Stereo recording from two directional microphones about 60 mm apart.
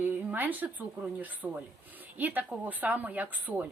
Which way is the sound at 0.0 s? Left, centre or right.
Right.